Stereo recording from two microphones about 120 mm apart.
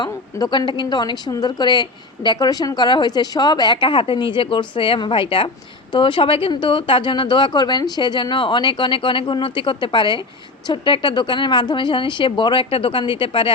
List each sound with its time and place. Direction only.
0.1 s a woman's voice: 30° left (ahead or behind)